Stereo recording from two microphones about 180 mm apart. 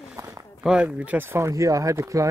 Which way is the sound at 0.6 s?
5° right (ahead or behind).